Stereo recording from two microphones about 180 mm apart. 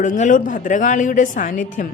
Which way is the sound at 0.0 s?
45° left (ahead or behind).